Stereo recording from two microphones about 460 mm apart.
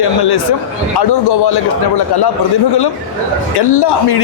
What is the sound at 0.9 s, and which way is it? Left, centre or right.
Speech, left.